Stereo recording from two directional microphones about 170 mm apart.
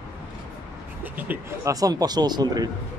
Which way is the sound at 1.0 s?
10° right (ahead or behind).